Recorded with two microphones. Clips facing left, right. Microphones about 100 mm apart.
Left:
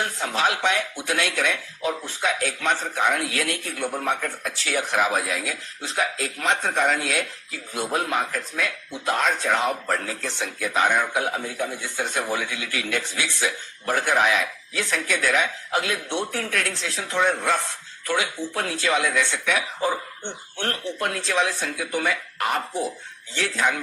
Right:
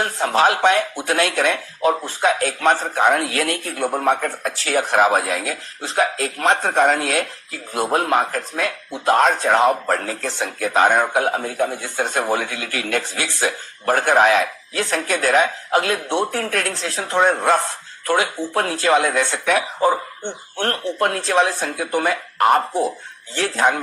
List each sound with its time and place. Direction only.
0.0 s speech: 45° right (ahead or behind)